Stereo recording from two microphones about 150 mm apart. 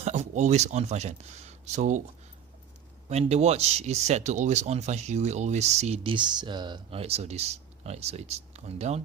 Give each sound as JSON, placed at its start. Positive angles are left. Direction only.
{"t": 0.0, "sound": "speech", "side_deg": -50}
{"t": 3.1, "sound": "speech", "side_deg": -45}
{"t": 7.0, "sound": "speech", "side_deg": -45}